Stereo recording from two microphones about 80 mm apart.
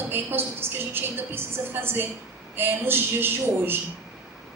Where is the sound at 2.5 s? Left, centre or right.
Right.